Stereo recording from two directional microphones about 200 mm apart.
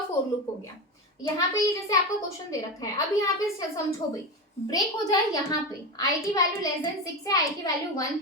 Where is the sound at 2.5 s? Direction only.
15° left (ahead or behind).